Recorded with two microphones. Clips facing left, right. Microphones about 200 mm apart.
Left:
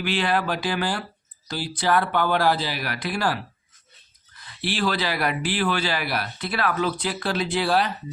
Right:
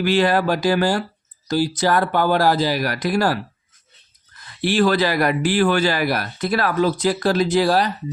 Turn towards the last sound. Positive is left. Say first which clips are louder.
# right 5 dB
turn(degrees=-40)  # may be behind; listen again after turning